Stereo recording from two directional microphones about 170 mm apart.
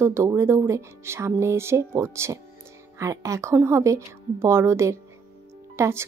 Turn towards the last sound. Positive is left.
turn(degrees=-15)  # may be behind; listen again after turning